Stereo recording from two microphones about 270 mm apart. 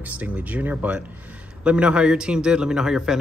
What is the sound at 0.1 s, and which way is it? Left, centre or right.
Speech, centre.